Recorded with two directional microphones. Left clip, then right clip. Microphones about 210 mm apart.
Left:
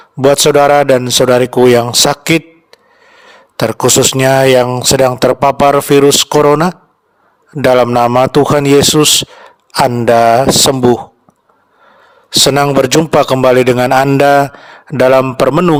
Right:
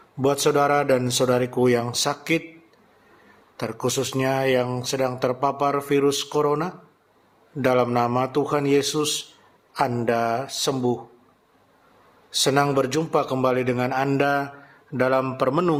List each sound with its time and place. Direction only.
0.2 s a man's voice: 45° left (ahead or behind)
3.6 s a man's voice: 50° left (ahead or behind)
12.3 s a man's voice: 45° left (ahead or behind)